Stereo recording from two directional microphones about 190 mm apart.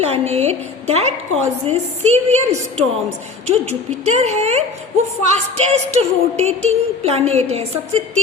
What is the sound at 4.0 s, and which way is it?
Music, 35° right (ahead or behind).